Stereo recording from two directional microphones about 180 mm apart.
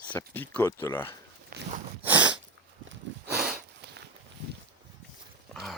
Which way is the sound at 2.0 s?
10° right (ahead or behind).